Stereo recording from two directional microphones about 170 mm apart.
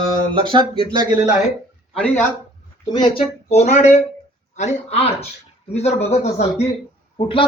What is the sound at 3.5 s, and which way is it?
A man's voice, 40° left (ahead or behind).